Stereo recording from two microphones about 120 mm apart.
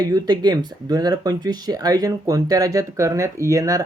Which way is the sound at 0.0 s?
35° right (ahead or behind).